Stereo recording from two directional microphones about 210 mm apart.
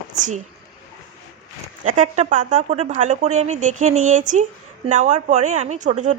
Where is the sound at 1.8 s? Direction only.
35° right (ahead or behind).